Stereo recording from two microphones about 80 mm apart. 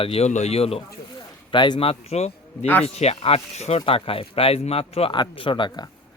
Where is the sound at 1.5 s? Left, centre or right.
Left.